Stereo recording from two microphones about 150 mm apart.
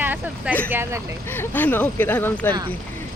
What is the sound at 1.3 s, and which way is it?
Speech, 15° left (ahead or behind).